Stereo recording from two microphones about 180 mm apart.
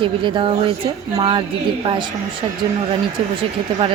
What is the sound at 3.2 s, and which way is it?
Speech, 30° right (ahead or behind).